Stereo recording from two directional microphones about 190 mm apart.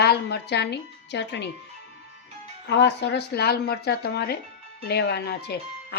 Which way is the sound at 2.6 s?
65° left (ahead or behind).